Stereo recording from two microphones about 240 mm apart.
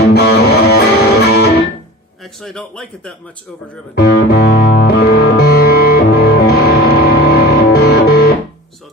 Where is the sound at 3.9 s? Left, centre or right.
Left.